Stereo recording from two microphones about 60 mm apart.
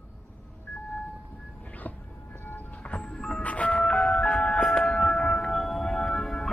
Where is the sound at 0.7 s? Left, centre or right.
Left.